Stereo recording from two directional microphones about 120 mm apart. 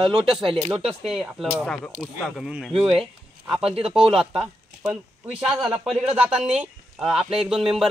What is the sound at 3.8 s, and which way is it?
Speech, 5° right (ahead or behind).